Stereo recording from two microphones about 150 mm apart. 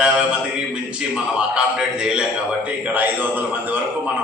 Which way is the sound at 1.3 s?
5° right (ahead or behind).